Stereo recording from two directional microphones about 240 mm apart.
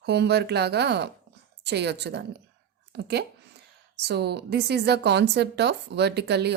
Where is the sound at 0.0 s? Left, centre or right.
Right.